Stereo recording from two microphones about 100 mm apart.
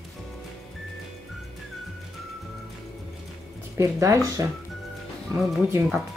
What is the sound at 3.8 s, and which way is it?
Speech, 30° right (ahead or behind).